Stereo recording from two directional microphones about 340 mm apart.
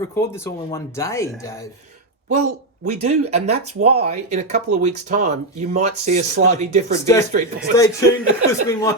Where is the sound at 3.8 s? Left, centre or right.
Right.